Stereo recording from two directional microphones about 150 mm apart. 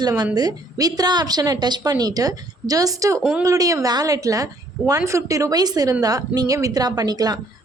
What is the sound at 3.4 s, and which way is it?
A woman's voice, 20° right (ahead or behind).